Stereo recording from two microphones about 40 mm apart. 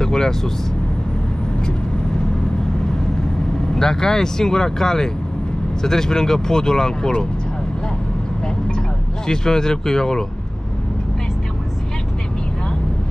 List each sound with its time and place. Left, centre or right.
0.0 s speech: centre
3.7 s speech: centre
9.3 s speech: centre